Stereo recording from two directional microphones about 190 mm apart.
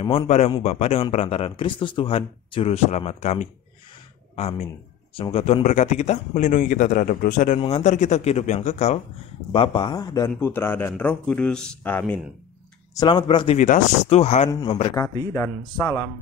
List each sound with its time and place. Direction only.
0.0 s a man's voice: 25° left (ahead or behind); by 12.2 s 5° left (ahead or behind)
12.9 s speech: 25° left (ahead or behind)
13.6 s a man's voice: 40° left (ahead or behind); by 16.0 s 15° left (ahead or behind)